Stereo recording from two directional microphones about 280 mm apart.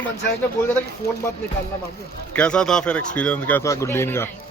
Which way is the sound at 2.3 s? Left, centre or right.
Centre.